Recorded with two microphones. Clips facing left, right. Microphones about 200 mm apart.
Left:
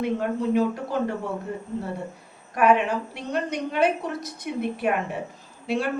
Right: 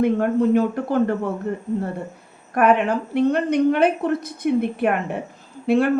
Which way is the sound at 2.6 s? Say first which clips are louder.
Right 3 dB; 55° right (ahead or behind).